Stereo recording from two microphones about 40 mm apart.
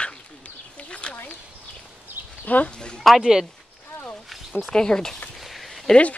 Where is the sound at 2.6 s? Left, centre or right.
Centre.